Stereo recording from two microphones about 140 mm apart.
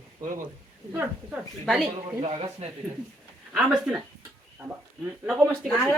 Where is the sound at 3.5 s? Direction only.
Centre (ahead or behind).